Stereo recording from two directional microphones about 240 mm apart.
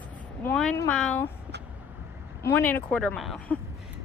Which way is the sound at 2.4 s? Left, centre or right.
Centre.